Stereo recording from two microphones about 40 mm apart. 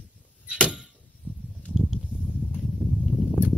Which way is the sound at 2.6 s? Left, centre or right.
Centre.